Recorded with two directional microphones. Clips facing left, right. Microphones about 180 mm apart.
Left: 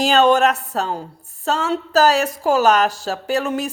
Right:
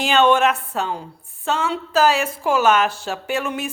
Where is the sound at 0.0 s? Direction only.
40° left (ahead or behind).